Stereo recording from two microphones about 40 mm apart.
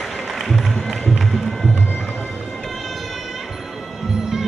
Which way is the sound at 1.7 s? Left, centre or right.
Left.